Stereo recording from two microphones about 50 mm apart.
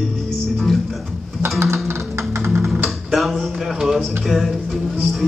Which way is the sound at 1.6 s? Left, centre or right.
Right.